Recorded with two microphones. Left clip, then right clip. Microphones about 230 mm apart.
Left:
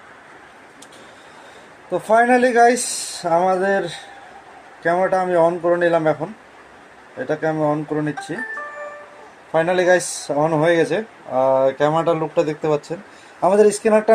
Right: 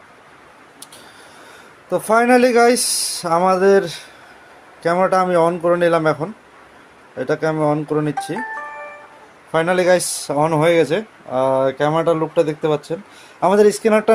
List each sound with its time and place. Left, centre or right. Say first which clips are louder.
1.9 s a man's voice: right 1 dB; right
7.3 s a man's voice: right 2 dB; right
9.6 s speech: right 1 dB; right